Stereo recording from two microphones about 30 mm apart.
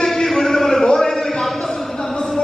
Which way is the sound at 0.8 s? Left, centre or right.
Left.